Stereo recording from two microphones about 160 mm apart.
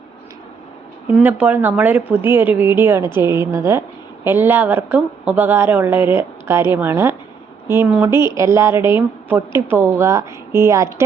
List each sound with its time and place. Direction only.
1.1 s a woman's voice: 10° right (ahead or behind)